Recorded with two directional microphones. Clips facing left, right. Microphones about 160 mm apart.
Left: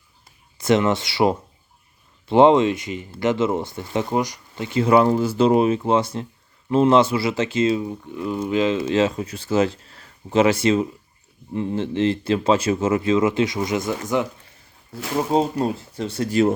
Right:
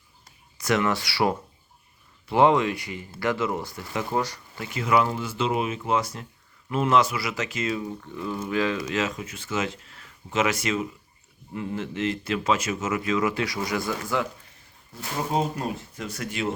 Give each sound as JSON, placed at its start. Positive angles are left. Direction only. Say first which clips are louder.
{"t": 0.6, "sound": "speech", "louder": "left 6 dB", "side_deg": 25}
{"t": 15.3, "sound": "speech", "louder": "left 6 dB", "side_deg": 30}